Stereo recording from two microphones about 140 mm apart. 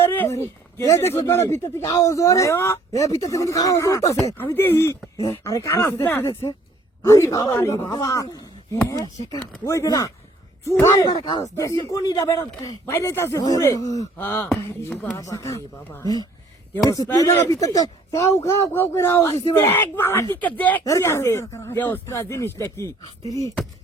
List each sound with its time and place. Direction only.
0.0 s a sound: 15° left (ahead or behind)
1.1 s speech: 20° left (ahead or behind)
11.1 s speech: 40° left (ahead or behind)
11.4 s speech: 25° left (ahead or behind)
14.2 s speech: 15° left (ahead or behind)